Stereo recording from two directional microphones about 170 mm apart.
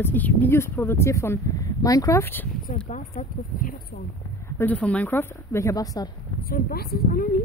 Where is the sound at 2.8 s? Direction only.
50° left (ahead or behind).